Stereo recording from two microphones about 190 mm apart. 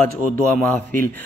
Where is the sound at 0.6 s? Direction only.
10° left (ahead or behind).